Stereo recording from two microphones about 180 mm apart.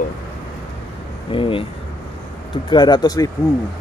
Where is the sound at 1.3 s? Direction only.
30° left (ahead or behind).